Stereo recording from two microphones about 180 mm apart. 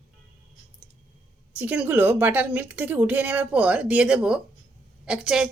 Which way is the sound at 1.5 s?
10° right (ahead or behind).